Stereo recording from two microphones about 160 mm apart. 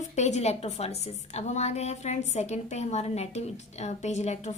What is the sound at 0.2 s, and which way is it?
A woman's voice, 45° left (ahead or behind).